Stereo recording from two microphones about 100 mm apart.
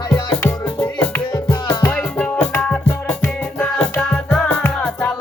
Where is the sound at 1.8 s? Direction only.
10° left (ahead or behind).